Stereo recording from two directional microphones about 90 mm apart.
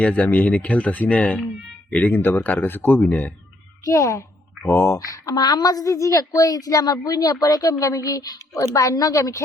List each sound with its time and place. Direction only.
0.0 s speech: 15° left (ahead or behind)
3.8 s a woman's voice: 35° left (ahead or behind)
4.9 s a woman's voice: 40° left (ahead or behind)